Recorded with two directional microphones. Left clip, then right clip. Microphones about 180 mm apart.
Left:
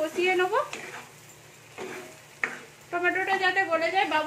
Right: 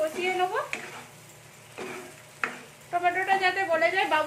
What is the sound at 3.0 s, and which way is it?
A man's voice, 30° left (ahead or behind).